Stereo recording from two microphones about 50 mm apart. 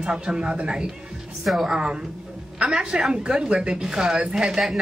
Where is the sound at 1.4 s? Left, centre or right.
Centre.